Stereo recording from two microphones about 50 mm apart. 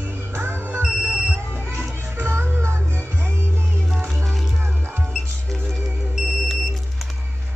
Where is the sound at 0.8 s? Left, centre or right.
Centre.